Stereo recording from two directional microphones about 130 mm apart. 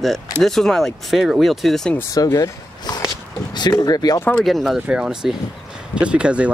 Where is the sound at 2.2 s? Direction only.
25° left (ahead or behind).